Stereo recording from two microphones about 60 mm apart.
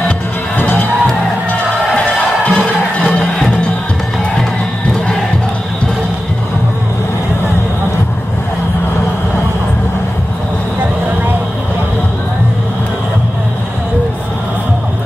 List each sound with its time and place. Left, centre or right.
0.6 s music: left
2.1 s music: centre